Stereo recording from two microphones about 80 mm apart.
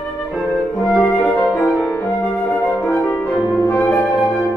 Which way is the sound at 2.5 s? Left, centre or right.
Centre.